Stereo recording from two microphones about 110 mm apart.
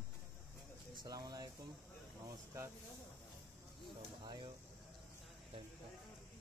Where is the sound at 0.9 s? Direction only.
40° right (ahead or behind).